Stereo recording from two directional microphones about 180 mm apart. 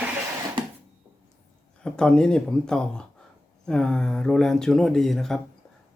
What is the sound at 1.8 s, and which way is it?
Speech, 5° left (ahead or behind).